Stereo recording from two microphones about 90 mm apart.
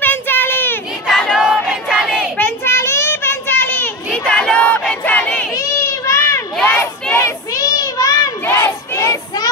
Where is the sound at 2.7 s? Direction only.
30° left (ahead or behind).